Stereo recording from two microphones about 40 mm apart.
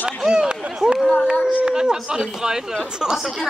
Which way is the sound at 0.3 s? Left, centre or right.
Right.